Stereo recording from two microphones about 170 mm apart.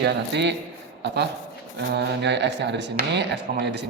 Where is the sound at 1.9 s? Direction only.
90° right.